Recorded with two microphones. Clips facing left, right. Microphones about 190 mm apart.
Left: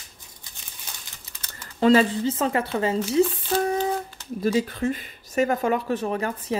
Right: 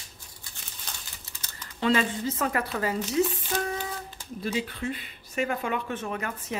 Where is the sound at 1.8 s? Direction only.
35° left (ahead or behind).